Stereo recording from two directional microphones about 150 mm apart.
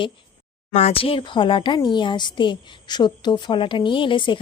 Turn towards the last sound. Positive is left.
turn(degrees=35)  # may be behind; listen again after turning